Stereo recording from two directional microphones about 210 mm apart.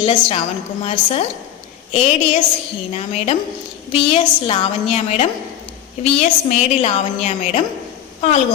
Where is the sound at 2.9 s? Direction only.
30° left (ahead or behind).